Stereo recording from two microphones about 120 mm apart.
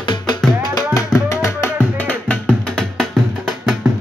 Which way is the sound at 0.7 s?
25° left (ahead or behind).